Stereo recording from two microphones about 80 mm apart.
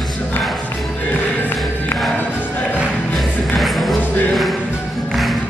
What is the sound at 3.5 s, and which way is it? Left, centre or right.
Music, centre.